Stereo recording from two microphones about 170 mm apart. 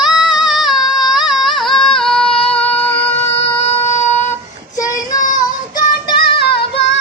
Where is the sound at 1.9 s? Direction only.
5° left (ahead or behind).